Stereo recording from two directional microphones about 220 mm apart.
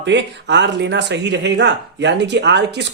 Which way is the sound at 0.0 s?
55° right (ahead or behind).